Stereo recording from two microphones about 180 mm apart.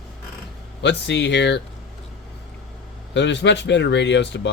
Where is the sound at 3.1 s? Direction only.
80° left.